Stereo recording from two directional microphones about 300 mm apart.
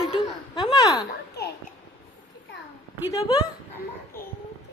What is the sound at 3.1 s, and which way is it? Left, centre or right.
Speech, centre.